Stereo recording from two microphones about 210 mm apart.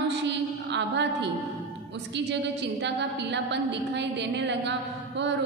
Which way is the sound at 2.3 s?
55° right (ahead or behind).